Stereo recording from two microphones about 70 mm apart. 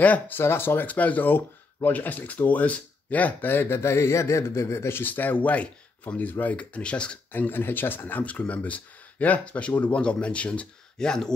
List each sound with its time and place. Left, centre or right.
0.0 s speech: left
0.4 s speech: left; by 7.2 s centre
7.3 s speech: left; by 11.3 s centre